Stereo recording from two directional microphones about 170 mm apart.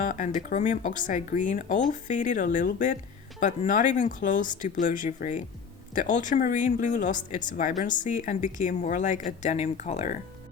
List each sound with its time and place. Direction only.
0.0 s speech: 50° left (ahead or behind)